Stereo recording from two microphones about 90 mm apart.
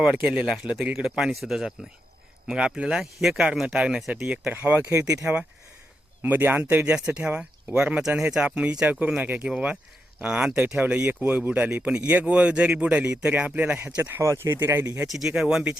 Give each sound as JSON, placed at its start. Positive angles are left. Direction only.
{"t": 0.0, "sound": "speech", "side_deg": -10}
{"t": 4.5, "sound": "speech", "side_deg": -20}
{"t": 6.2, "sound": "speech", "side_deg": -20}
{"t": 13.1, "sound": "speech", "side_deg": -25}
{"t": 13.4, "sound": "speech", "side_deg": -10}
{"t": 15.1, "sound": "speech", "side_deg": -5}